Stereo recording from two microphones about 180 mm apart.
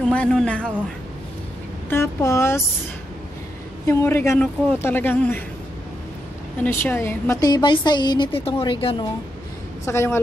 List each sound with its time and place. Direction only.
0.0 s a man's voice: 5° left (ahead or behind)
1.9 s a man's voice: 15° left (ahead or behind)
3.8 s a man's voice: 15° left (ahead or behind)
6.6 s a woman's voice: 10° left (ahead or behind); by 9.0 s 30° left (ahead or behind)
9.8 s a man's voice: 15° left (ahead or behind)